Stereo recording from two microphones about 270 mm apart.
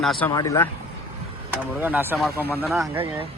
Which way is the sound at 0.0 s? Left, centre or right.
Centre.